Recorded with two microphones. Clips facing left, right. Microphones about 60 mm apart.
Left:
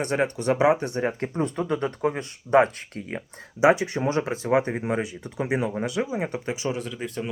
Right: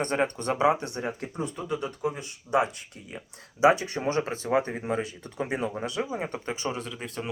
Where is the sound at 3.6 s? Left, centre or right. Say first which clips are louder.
Left 2 dB; left.